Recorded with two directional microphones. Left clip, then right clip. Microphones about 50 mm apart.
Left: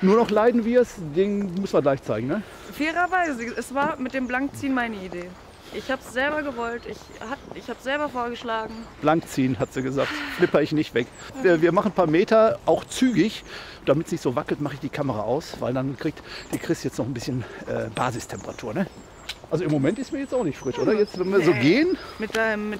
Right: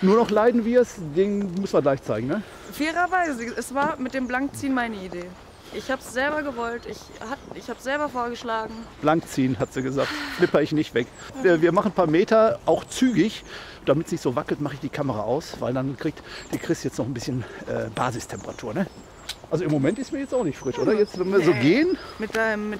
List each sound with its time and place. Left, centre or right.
0.1 s speech: centre
2.8 s speech: centre
8.6 s speech: centre
9.9 s speech: centre
10.5 s speech: centre
22.2 s speech: centre